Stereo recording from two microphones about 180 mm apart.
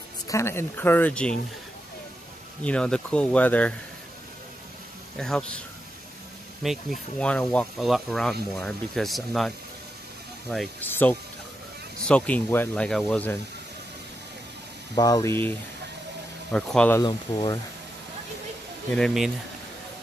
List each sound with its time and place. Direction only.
0.3 s speech: 15° left (ahead or behind)
2.6 s speech: 5° left (ahead or behind)
5.1 s speech: 5° left (ahead or behind)
6.6 s speech: centre (ahead or behind)
10.5 s speech: centre (ahead or behind)
15.0 s speech: 20° left (ahead or behind)
16.5 s speech: 5° left (ahead or behind)
17.0 s speech: 25° left (ahead or behind)
18.9 s speech: centre (ahead or behind)